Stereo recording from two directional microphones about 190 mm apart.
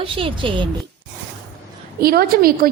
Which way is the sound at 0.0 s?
30° right (ahead or behind).